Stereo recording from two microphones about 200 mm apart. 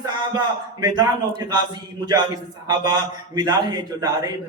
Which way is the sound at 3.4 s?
20° right (ahead or behind).